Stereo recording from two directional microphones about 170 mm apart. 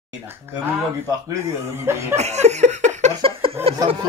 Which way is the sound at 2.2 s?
40° right (ahead or behind).